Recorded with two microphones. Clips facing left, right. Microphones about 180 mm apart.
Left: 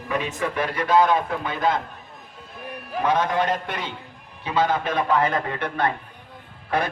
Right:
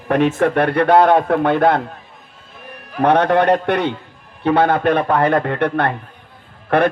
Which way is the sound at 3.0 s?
65° right (ahead or behind).